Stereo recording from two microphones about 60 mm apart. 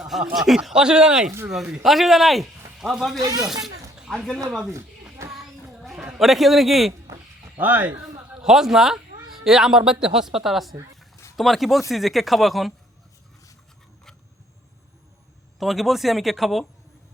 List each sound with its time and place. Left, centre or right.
0.0 s speech: centre
1.8 s a man's voice: centre
3.2 s speech: right
3.4 s speech: centre
3.9 s a sound: centre
5.3 s child singing: centre
6.1 s speech: centre
7.5 s speech: right
8.4 s speech: centre
15.5 s speech: centre